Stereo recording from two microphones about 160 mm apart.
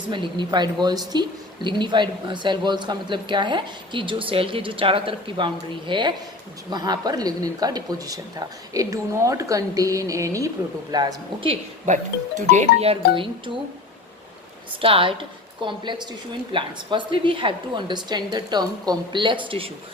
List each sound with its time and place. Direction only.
0.1 s speech: 30° right (ahead or behind)
12.5 s a woman's voice: 45° right (ahead or behind)
14.8 s a woman's voice: 35° right (ahead or behind)